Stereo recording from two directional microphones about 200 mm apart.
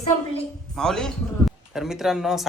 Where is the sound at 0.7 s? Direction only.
Centre (ahead or behind).